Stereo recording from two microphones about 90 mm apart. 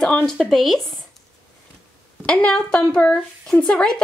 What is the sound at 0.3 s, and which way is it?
Speech, 5° left (ahead or behind).